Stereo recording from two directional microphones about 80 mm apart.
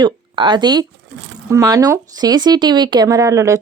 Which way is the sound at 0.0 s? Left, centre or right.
Right.